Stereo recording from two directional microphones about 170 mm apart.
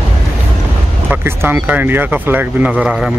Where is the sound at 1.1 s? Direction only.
10° right (ahead or behind).